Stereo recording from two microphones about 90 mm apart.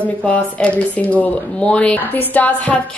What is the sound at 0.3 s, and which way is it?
Speech, 15° left (ahead or behind).